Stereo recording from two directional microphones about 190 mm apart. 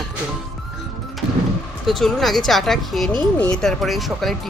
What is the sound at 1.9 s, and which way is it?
Speech, centre (ahead or behind).